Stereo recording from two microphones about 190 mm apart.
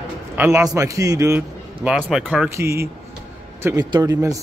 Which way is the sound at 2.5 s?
15° right (ahead or behind).